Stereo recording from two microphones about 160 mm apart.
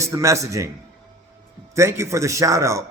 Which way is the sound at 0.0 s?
20° right (ahead or behind).